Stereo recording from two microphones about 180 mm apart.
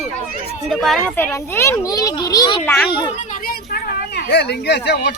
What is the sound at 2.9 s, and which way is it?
Speech, 25° left (ahead or behind).